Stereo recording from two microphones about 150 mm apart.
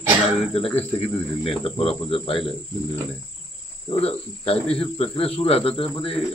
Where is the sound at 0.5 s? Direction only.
40° left (ahead or behind).